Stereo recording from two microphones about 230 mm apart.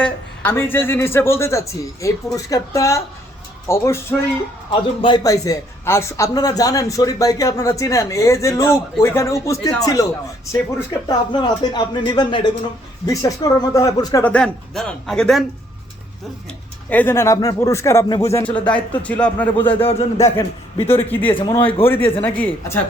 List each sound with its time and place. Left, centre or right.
0.0 s a man's voice: centre
11.3 s speech: centre
16.9 s a man's voice: centre
19.6 s speech: left
20.1 s a man's voice: centre
21.8 s a man's voice: centre